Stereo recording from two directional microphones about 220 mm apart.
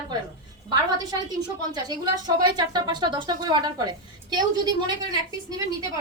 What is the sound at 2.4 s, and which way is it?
A woman's voice, 20° right (ahead or behind).